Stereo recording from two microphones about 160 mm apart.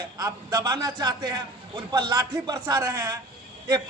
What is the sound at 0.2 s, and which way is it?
A man's voice, 20° right (ahead or behind).